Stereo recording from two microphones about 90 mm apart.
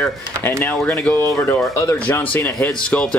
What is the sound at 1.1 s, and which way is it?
Speech, 25° left (ahead or behind).